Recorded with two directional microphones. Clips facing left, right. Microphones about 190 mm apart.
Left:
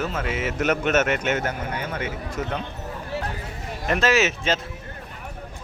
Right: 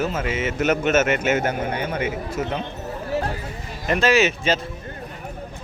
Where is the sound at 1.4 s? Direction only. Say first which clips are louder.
Right 4 dB; 20° right (ahead or behind).